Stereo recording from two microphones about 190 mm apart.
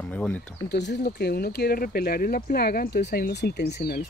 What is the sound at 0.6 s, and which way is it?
Speech, 65° left (ahead or behind).